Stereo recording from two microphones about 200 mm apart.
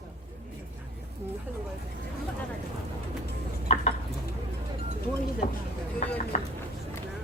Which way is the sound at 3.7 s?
35° left (ahead or behind).